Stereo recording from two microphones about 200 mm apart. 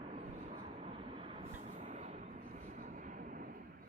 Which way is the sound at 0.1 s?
35° right (ahead or behind).